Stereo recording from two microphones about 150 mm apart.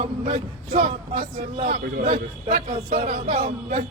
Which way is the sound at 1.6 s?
90° right.